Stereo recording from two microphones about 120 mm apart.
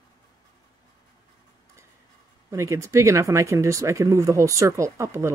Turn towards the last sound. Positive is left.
turn(degrees=-25)  # may be behind; listen again after turning